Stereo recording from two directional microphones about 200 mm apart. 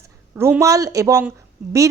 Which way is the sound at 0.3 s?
10° right (ahead or behind).